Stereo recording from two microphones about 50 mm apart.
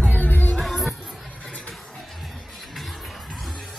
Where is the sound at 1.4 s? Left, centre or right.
Left.